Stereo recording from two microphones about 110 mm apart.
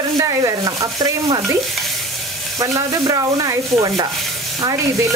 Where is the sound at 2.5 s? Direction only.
30° right (ahead or behind).